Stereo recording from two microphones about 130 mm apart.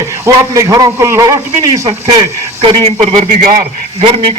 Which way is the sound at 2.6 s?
40° right (ahead or behind).